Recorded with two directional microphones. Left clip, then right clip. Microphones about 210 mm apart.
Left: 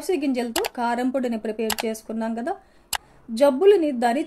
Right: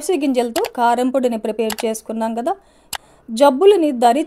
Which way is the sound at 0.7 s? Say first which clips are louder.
Right 11 dB; 35° right (ahead or behind).